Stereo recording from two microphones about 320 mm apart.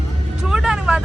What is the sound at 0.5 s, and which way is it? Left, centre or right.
Vehicle, centre.